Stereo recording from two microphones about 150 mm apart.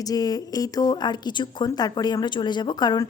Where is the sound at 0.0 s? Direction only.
25° left (ahead or behind).